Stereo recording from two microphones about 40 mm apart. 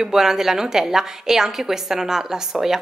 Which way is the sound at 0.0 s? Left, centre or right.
Centre.